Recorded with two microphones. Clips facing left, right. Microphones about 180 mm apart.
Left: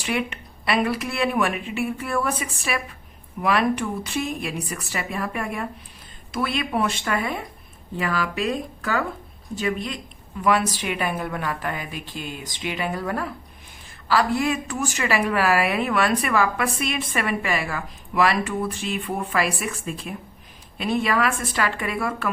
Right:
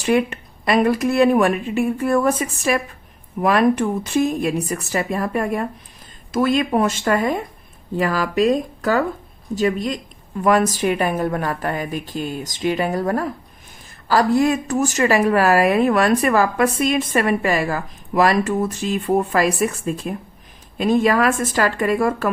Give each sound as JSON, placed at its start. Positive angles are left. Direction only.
{"t": 0.0, "sound": "a woman's voice", "side_deg": -40}